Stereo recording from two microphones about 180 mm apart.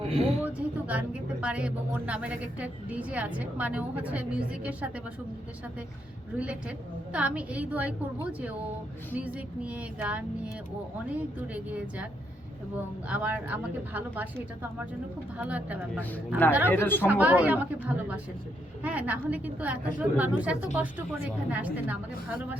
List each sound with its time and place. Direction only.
0.0 s a sound: 30° right (ahead or behind)
0.4 s speech: 10° right (ahead or behind)
6.3 s speech: 5° right (ahead or behind)
13.1 s speech: 10° right (ahead or behind)
16.6 s speech: 10° left (ahead or behind)
17.1 s speech: 10° right (ahead or behind)